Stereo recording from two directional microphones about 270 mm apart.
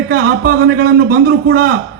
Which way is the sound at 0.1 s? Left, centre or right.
Right.